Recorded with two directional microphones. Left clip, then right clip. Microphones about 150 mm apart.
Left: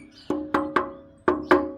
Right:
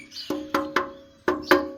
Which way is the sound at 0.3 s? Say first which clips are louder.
Left 2 dB; 25° left (ahead or behind).